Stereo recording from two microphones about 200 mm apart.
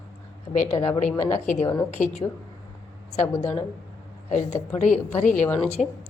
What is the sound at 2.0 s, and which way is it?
A woman's voice, 35° left (ahead or behind).